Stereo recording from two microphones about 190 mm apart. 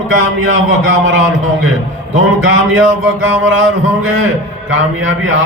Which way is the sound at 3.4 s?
90° right.